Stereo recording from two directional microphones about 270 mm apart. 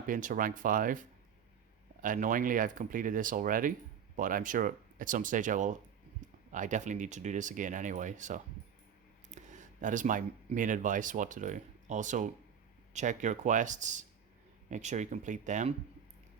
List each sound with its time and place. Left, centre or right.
0.1 s speech: right